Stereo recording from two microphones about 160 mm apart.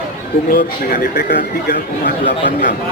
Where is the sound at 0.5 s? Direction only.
65° left (ahead or behind).